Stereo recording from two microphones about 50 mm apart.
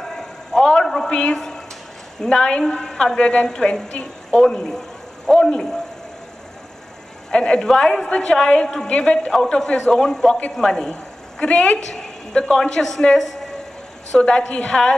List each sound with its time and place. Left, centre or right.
0.1 s a sound: centre
1.1 s a man's voice: centre
7.2 s a woman's voice: centre
11.9 s a woman's voice: centre
14.1 s a woman's voice: centre